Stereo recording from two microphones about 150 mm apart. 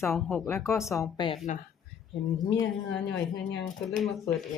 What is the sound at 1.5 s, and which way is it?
Speech, 50° left (ahead or behind).